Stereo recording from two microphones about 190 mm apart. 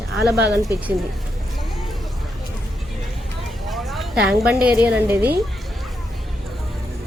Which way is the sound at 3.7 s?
Centre (ahead or behind).